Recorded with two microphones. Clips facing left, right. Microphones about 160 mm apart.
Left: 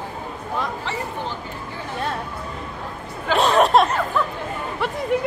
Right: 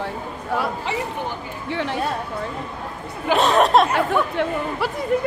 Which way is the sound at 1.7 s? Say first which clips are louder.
Right 10 dB; 75° right (ahead or behind).